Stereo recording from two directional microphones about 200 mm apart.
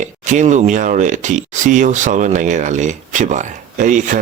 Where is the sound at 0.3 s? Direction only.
35° right (ahead or behind).